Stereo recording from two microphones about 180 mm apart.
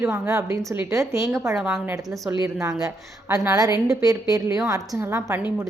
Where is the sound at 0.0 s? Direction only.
15° right (ahead or behind).